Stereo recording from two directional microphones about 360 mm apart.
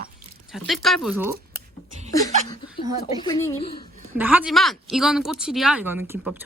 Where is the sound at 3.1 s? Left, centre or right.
Centre.